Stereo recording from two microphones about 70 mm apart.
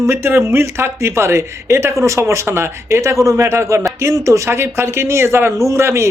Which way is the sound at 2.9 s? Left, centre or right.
Right.